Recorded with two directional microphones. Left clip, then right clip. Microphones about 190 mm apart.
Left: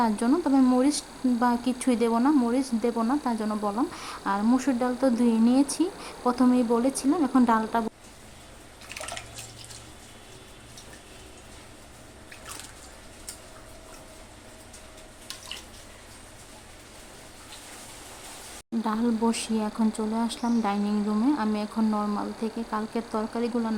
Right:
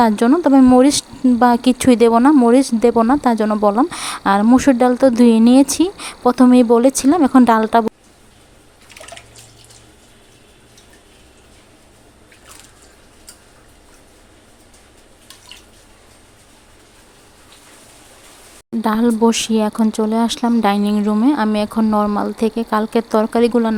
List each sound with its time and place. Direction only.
0.0 s speech: 40° right (ahead or behind)
18.8 s speech: 40° right (ahead or behind)